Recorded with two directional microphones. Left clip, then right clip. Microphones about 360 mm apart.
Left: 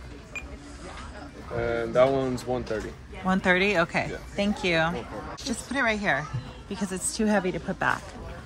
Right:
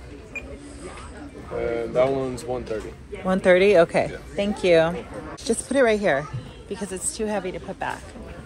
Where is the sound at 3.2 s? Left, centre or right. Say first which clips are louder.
Right 6 dB; centre.